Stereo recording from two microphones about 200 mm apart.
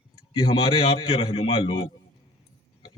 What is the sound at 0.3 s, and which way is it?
A man's voice, 25° left (ahead or behind).